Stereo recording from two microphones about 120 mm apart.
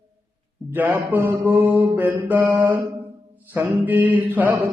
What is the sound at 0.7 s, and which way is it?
Mantra, 15° right (ahead or behind).